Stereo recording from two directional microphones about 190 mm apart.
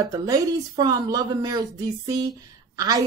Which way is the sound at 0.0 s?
20° right (ahead or behind).